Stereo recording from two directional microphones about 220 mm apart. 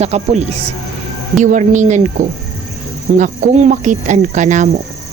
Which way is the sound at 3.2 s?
35° right (ahead or behind).